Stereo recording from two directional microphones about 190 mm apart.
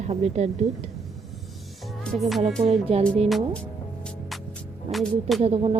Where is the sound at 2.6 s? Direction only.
30° right (ahead or behind).